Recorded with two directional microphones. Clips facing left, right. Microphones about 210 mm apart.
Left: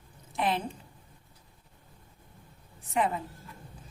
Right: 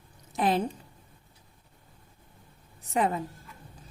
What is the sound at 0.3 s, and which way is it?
Speech, 40° right (ahead or behind).